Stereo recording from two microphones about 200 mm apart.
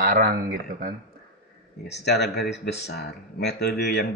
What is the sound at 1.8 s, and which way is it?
Speech, 55° left (ahead or behind).